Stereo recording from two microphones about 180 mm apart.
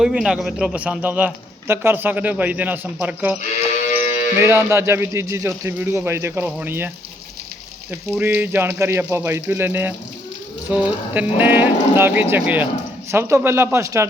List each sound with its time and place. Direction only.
0.0 s a man's voice: 5° right (ahead or behind)
3.8 s a sound: 40° left (ahead or behind)
4.4 s a man's voice: 15° right (ahead or behind)